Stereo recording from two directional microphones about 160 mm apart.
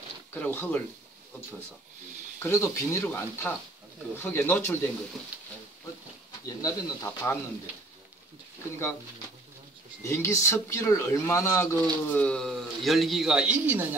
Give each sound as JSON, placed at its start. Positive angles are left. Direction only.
{"t": 0.3, "sound": "speech", "side_deg": 10}
{"t": 2.4, "sound": "speech", "side_deg": 15}
{"t": 5.3, "sound": "a sound", "side_deg": -10}
{"t": 6.4, "sound": "speech", "side_deg": 20}
{"t": 10.0, "sound": "speech", "side_deg": 15}